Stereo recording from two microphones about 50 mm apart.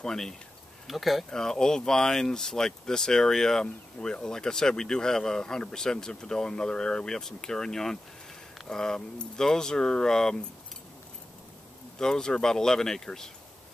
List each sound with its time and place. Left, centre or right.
0.0 s speech: centre
0.8 s speech: centre
1.3 s speech: centre
12.0 s speech: centre